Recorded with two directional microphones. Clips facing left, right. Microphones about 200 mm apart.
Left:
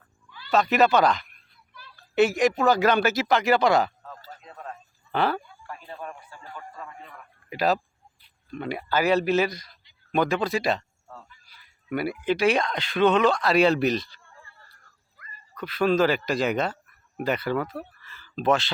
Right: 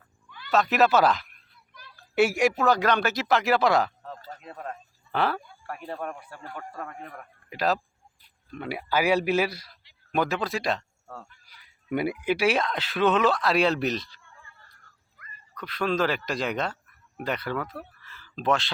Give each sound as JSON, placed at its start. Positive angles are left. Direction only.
{"t": 0.3, "sound": "cat", "side_deg": -50}
{"t": 0.5, "sound": "speech", "side_deg": 0}
{"t": 4.4, "sound": "a sound", "side_deg": -50}
{"t": 5.1, "sound": "speech", "side_deg": 0}
{"t": 5.6, "sound": "speech", "side_deg": -65}
{"t": 7.5, "sound": "speech", "side_deg": 0}
{"t": 11.1, "sound": "speech", "side_deg": -70}
{"t": 11.4, "sound": "speech", "side_deg": -15}
{"t": 15.2, "sound": "dog", "side_deg": 30}
{"t": 15.5, "sound": "speech", "side_deg": 5}